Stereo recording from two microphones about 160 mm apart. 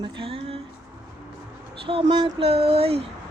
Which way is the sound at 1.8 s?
30° right (ahead or behind).